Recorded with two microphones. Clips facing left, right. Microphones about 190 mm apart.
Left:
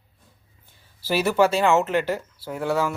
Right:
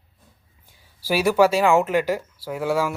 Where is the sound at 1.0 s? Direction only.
10° right (ahead or behind).